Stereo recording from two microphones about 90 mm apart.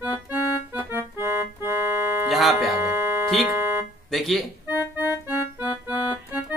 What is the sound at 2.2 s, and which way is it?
Speech, centre (ahead or behind).